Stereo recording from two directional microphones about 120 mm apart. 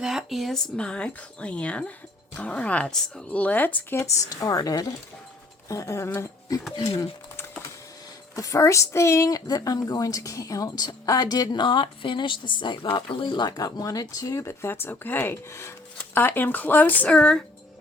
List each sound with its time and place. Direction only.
0.0 s speech: 5° right (ahead or behind); by 6.6 s 20° left (ahead or behind)
8.4 s speech: 25° left (ahead or behind); by 17.4 s 10° left (ahead or behind)